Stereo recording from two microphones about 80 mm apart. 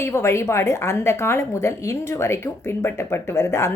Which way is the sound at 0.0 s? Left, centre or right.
Left.